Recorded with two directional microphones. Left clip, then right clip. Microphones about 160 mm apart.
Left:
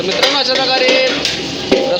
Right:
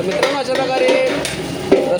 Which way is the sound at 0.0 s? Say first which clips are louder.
Left 4 dB; 5° right (ahead or behind).